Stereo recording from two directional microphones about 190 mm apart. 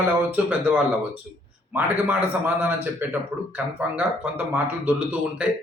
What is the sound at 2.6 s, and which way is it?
Speech, 10° right (ahead or behind).